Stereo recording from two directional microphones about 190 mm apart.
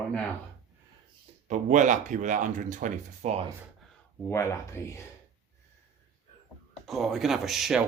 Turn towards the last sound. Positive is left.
turn(degrees=0)  # may be behind; listen again after turning